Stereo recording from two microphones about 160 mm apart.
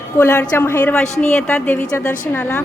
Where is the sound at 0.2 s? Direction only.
15° left (ahead or behind).